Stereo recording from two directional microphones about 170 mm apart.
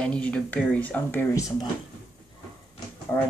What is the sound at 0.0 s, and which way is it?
Speech, 5° left (ahead or behind).